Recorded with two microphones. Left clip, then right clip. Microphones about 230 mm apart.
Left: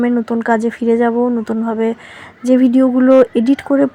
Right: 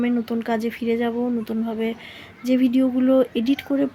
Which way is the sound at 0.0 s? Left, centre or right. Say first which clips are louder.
Left 8 dB; centre.